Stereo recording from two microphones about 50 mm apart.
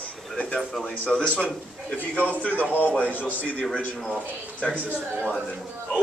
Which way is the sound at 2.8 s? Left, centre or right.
Left.